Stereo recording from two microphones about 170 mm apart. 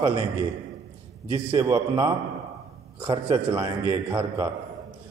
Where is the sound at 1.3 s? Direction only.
30° right (ahead or behind).